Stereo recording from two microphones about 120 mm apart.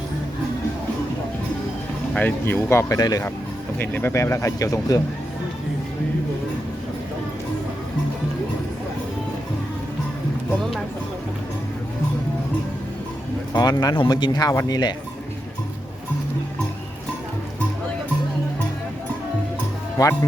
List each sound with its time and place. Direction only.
2.1 s speech: 15° left (ahead or behind); by 3.3 s 30° left (ahead or behind)
3.8 s speech: 20° left (ahead or behind)
13.5 s speech: 35° left (ahead or behind)